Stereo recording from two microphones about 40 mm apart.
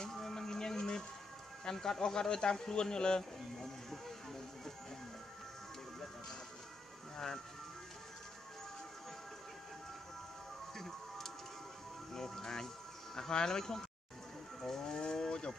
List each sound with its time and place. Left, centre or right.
0.0 s a sound: centre
1.6 s a man's voice: centre
3.2 s a sound: centre
10.8 s music: centre
13.1 s speech: centre
14.6 s livestock: centre